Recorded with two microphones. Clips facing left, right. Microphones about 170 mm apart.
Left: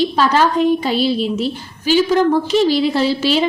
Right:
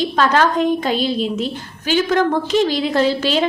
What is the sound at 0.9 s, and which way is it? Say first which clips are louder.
A woman's voice: left 2 dB; 45° right (ahead or behind).